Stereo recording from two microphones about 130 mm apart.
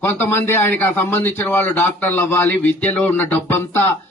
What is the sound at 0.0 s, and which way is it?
A man's voice, 20° left (ahead or behind).